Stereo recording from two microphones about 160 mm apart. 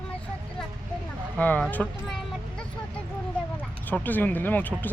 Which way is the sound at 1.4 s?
10° left (ahead or behind).